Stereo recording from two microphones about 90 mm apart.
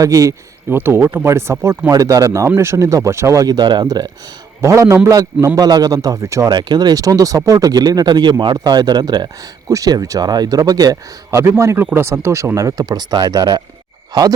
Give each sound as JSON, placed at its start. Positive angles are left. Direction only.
{"t": 0.0, "sound": "speech", "side_deg": -35}
{"t": 1.9, "sound": "speech", "side_deg": -40}
{"t": 3.4, "sound": "speech", "side_deg": -50}
{"t": 4.6, "sound": "speech", "side_deg": -35}
{"t": 6.5, "sound": "speech", "side_deg": -50}
{"t": 9.6, "sound": "speech", "side_deg": -40}
{"t": 11.3, "sound": "speech", "side_deg": -30}